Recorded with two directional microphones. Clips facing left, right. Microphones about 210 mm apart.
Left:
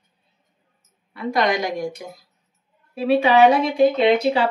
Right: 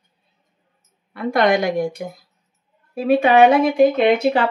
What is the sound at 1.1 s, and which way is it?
Speech, 55° right (ahead or behind).